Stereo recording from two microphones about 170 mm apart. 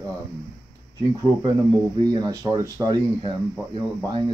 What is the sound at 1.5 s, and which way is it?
Speech, 20° right (ahead or behind).